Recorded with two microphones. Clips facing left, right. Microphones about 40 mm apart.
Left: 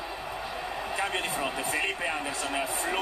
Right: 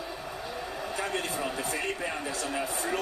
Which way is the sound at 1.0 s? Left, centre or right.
Left.